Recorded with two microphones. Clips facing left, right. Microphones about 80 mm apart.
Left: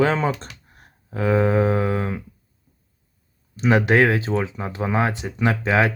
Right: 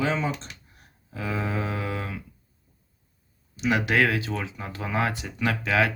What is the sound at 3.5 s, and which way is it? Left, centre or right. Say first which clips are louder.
Speech: left 6 dB; left.